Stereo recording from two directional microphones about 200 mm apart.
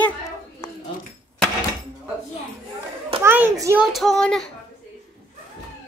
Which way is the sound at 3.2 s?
10° right (ahead or behind).